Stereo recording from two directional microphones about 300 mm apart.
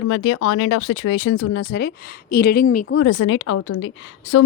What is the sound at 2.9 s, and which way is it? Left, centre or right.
A woman's voice, left.